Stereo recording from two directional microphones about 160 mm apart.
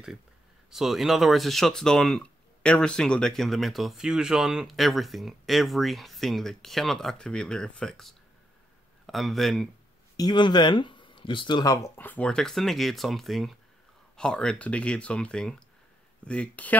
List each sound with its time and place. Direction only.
0.7 s speech: centre (ahead or behind)
10.1 s speech: 25° left (ahead or behind)
12.0 s speech: 10° left (ahead or behind)